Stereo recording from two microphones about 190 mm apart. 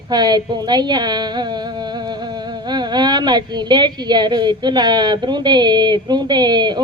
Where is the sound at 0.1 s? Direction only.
20° right (ahead or behind).